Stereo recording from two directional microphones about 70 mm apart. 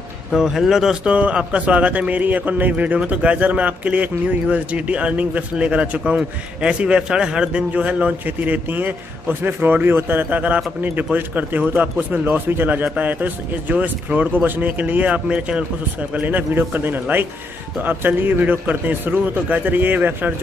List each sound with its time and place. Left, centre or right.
0.4 s speech: centre
1.1 s speech: centre